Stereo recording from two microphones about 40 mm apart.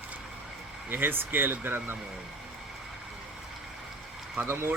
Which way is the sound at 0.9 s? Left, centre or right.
Right.